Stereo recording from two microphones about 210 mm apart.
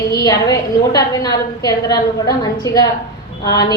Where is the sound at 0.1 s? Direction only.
15° left (ahead or behind).